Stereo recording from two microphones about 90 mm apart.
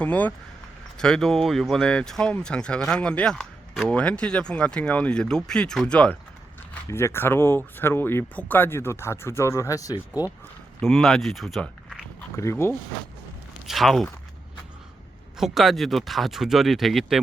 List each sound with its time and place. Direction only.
0.0 s speech: 15° left (ahead or behind)
6.8 s speech: 30° left (ahead or behind)
10.8 s speech: centre (ahead or behind)
12.4 s speech: 30° left (ahead or behind)
13.7 s speech: centre (ahead or behind)
15.4 s speech: 5° right (ahead or behind)